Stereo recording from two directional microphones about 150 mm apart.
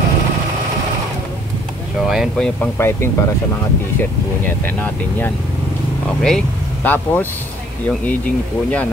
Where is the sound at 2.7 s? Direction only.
15° left (ahead or behind).